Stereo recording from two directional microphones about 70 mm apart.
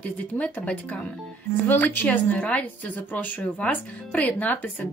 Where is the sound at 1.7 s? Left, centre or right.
Left.